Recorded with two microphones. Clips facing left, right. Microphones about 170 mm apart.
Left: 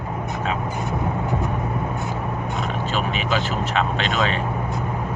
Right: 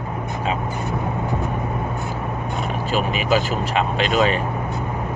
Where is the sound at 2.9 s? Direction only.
10° right (ahead or behind).